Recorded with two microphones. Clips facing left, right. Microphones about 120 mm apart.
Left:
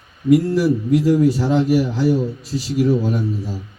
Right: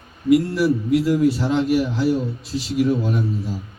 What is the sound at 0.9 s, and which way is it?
A man's voice, 40° left (ahead or behind).